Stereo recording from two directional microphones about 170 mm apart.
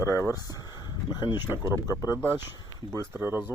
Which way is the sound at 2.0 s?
20° left (ahead or behind).